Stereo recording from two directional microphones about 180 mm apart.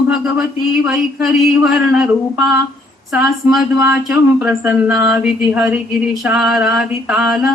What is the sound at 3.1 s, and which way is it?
Speech, 5° right (ahead or behind).